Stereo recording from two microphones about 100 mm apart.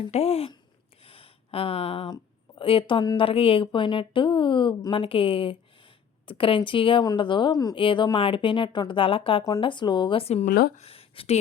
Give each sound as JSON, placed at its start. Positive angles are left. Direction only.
{"t": 0.1, "sound": "speech", "side_deg": 90}
{"t": 1.0, "sound": "a sound", "side_deg": 75}
{"t": 2.6, "sound": "a woman's voice", "side_deg": 60}
{"t": 7.5, "sound": "a woman's voice", "side_deg": 35}
{"t": 7.8, "sound": "a woman's voice", "side_deg": 55}
{"t": 9.6, "sound": "a woman's voice", "side_deg": 50}